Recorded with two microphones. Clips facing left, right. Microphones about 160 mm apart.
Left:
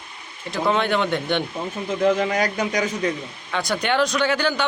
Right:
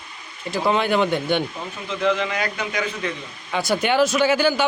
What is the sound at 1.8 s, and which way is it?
A man's voice, 45° left (ahead or behind).